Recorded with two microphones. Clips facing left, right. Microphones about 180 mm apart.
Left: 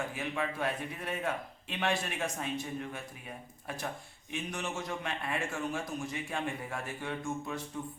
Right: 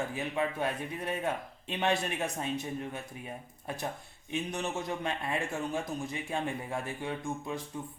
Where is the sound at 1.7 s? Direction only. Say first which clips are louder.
Right 3 dB; 20° right (ahead or behind).